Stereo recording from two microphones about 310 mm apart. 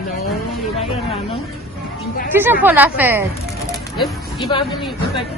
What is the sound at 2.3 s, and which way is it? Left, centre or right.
Speech, centre.